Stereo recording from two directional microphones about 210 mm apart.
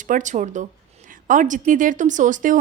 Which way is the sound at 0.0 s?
35° right (ahead or behind).